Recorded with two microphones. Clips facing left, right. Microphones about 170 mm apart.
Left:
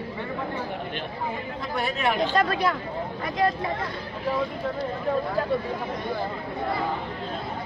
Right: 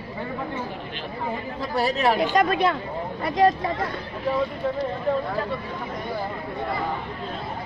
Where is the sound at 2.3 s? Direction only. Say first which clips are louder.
Right 3 dB; 15° right (ahead or behind).